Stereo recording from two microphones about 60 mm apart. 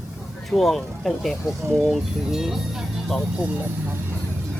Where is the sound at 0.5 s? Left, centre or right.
Centre.